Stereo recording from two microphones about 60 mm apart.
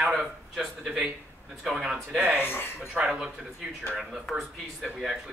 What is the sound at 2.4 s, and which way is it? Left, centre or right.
Speech, left.